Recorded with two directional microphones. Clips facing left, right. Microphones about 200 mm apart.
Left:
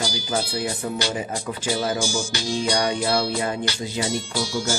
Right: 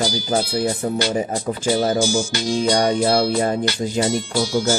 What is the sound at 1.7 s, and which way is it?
Music, 50° right (ahead or behind).